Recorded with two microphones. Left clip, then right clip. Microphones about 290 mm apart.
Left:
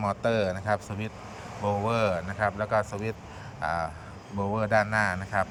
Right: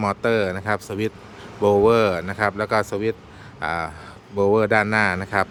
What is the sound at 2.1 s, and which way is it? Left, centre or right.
Speech, right.